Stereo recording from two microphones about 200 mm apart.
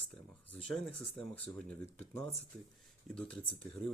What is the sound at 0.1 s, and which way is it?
Speech, 5° left (ahead or behind).